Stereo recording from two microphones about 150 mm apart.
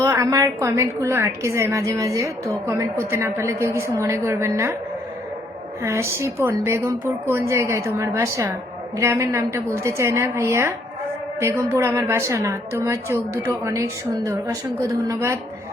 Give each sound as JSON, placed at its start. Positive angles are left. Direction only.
{"t": 0.0, "sound": "a woman's voice", "side_deg": -20}
{"t": 5.8, "sound": "a woman's voice", "side_deg": -15}